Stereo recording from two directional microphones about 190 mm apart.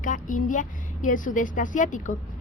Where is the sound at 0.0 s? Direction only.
45° left (ahead or behind).